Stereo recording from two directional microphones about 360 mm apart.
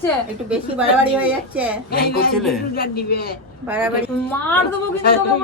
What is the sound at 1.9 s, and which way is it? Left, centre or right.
A man's voice, left.